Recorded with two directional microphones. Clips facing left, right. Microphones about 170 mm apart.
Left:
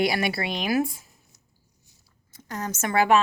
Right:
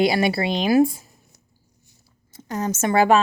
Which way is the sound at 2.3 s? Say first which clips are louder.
Right 7 dB; 25° right (ahead or behind).